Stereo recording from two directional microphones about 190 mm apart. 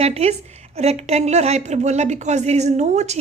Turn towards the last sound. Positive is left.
turn(degrees=-35)  # may be behind; listen again after turning